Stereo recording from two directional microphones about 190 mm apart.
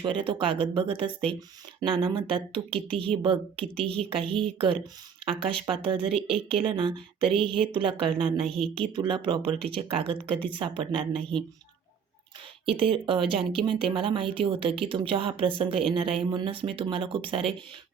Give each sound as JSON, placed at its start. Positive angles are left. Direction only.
{"t": 0.0, "sound": "speech", "side_deg": -25}
{"t": 8.4, "sound": "speech", "side_deg": 0}
{"t": 8.9, "sound": "speech", "side_deg": -25}
{"t": 12.6, "sound": "speech", "side_deg": -30}